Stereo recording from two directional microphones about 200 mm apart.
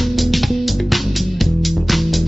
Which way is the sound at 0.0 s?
Centre (ahead or behind).